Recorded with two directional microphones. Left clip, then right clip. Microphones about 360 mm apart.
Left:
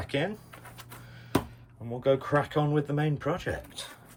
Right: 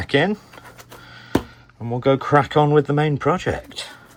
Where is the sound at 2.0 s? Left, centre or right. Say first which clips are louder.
Right 9 dB; right.